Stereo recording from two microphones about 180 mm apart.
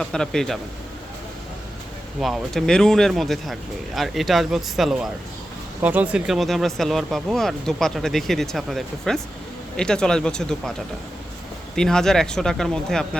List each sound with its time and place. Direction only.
0.0 s speech: 5° left (ahead or behind)
2.2 s speech: centre (ahead or behind)
11.8 s speech: 5° left (ahead or behind)